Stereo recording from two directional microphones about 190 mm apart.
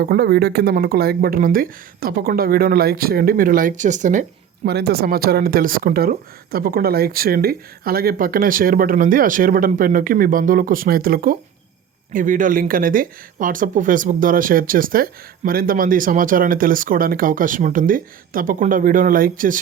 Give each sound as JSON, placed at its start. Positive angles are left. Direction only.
{"t": 0.0, "sound": "speech", "side_deg": -55}
{"t": 4.7, "sound": "speech", "side_deg": -55}